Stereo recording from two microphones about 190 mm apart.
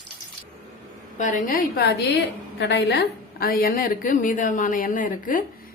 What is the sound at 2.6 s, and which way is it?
A woman's voice, 65° left (ahead or behind).